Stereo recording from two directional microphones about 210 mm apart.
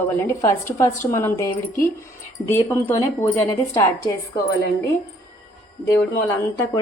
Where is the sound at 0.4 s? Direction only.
15° left (ahead or behind).